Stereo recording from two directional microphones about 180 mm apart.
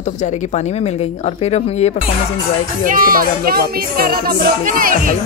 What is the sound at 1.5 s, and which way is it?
Speech, 35° left (ahead or behind).